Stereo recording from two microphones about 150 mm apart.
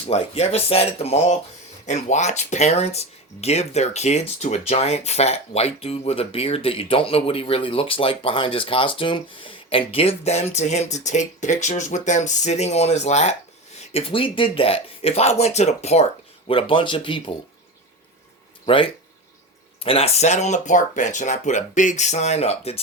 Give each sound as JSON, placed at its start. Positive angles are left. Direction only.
{"t": 0.0, "sound": "speech", "side_deg": 45}
{"t": 13.9, "sound": "speech", "side_deg": 35}
{"t": 16.5, "sound": "speech", "side_deg": 35}
{"t": 18.6, "sound": "speech", "side_deg": 35}